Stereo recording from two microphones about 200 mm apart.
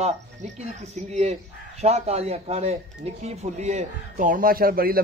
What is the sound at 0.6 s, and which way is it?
A man's voice, 30° right (ahead or behind).